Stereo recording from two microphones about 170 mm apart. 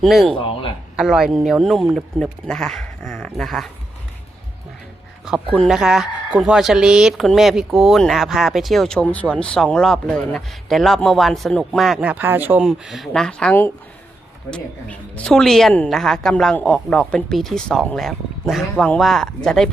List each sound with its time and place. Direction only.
0.0 s speech: centre (ahead or behind)
0.3 s a sound: 30° left (ahead or behind)
0.9 s speech: 5° right (ahead or behind)
3.2 s dog: 5° left (ahead or behind)
5.2 s speech: 5° right (ahead or behind)